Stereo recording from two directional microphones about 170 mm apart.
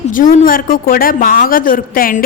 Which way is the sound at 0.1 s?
55° left (ahead or behind).